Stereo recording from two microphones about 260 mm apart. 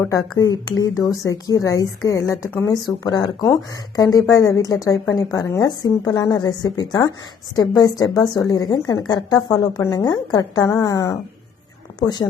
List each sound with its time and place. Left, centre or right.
0.0 s a woman's voice: centre